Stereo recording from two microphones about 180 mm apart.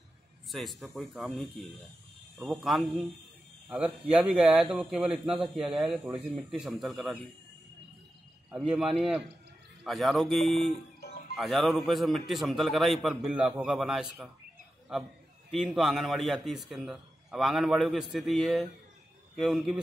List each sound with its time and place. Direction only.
0.5 s a man's voice: centre (ahead or behind)
8.5 s a man's voice: centre (ahead or behind)
11.0 s music: 55° left (ahead or behind)
11.3 s a man's voice: centre (ahead or behind)
15.5 s a man's voice: centre (ahead or behind)